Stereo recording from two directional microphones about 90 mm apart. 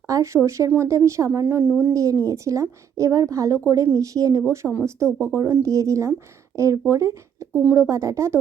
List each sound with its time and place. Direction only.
0.1 s a woman's voice: 35° right (ahead or behind)
1.9 s a woman's voice: 35° right (ahead or behind)